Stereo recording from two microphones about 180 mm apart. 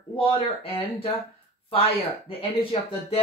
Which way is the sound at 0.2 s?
30° left (ahead or behind).